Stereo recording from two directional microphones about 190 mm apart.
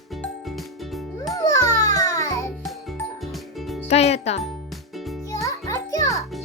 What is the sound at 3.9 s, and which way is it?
Music, 35° left (ahead or behind).